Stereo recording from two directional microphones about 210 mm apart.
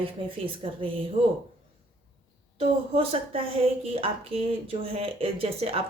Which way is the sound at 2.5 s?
25° right (ahead or behind).